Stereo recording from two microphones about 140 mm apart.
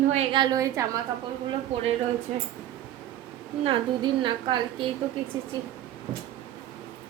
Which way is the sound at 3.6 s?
35° right (ahead or behind).